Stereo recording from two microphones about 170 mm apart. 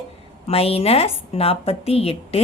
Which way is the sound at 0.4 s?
35° left (ahead or behind).